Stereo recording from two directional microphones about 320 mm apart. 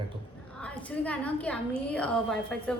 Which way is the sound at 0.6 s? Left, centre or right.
Centre.